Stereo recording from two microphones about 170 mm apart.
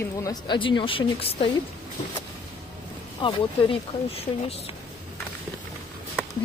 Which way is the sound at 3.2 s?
30° left (ahead or behind).